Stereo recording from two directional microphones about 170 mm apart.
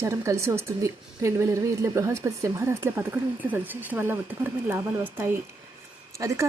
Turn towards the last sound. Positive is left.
turn(degrees=-20)  # may be behind; listen again after turning